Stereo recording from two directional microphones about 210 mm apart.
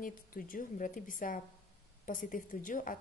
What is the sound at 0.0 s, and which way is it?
A woman's voice, 40° left (ahead or behind).